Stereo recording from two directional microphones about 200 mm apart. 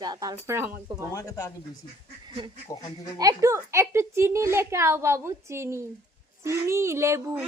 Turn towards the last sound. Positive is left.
turn(degrees=-15)  # may be behind; listen again after turning